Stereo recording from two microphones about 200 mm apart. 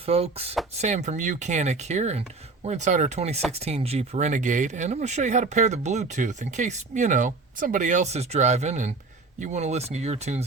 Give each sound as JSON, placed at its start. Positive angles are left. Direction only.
{"t": 0.0, "sound": "speech", "side_deg": -30}